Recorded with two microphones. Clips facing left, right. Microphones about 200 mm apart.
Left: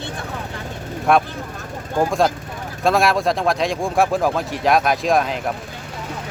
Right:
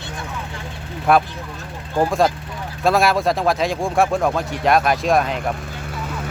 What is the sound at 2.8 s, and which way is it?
Speech, centre (ahead or behind).